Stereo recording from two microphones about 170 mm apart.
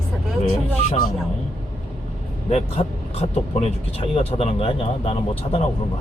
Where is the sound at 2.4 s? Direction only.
35° left (ahead or behind).